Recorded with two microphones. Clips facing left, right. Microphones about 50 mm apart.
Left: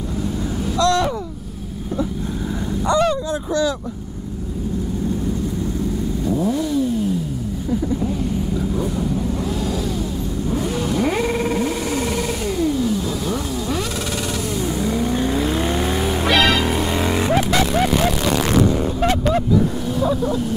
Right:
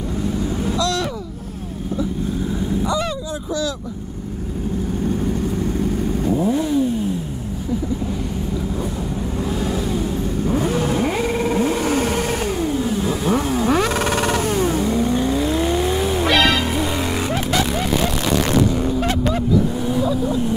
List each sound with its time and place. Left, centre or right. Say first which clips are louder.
0.7 s a sound: left 6 dB; left
6.3 s vehicle: right 1 dB; right
10.4 s vehicle: right 3 dB; right
11.5 s a sound: right 3 dB; right
15.0 s vehicle: right 1 dB; centre
18.7 s vehicle: left 1 dB; centre